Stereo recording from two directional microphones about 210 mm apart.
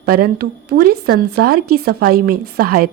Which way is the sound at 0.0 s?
45° right (ahead or behind).